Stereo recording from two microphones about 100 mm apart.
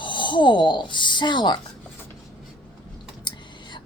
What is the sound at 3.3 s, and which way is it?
Clicking, 50° left (ahead or behind).